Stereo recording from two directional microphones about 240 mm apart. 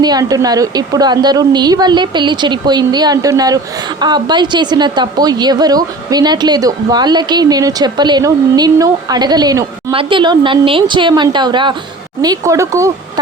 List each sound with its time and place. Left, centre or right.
0.0 s a woman's voice: centre